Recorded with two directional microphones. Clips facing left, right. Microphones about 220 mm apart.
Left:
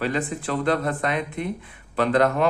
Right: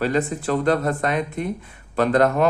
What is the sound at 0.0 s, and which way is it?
A man's voice, 40° right (ahead or behind).